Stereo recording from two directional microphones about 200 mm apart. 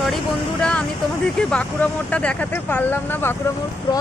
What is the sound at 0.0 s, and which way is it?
Vehicle, centre (ahead or behind).